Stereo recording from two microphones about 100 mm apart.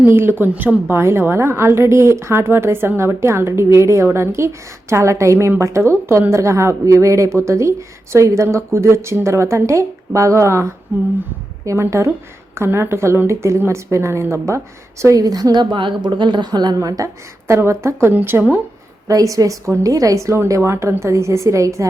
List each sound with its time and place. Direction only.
0.0 s a woman's voice: 25° right (ahead or behind)
17.5 s a woman's voice: 25° right (ahead or behind)
19.0 s a woman's voice: 35° right (ahead or behind)